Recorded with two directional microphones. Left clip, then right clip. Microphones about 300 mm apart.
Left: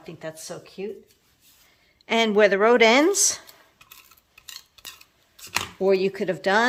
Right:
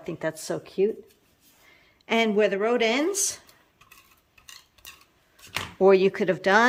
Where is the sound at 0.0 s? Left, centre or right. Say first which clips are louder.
Right 5 dB; centre.